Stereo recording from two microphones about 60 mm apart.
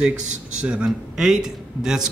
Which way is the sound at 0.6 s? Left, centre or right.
Centre.